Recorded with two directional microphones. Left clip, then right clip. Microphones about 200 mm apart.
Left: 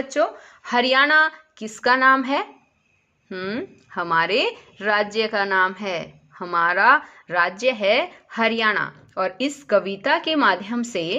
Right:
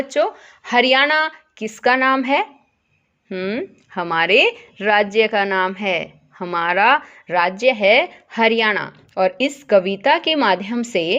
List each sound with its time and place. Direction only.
0.1 s a woman's voice: 35° right (ahead or behind)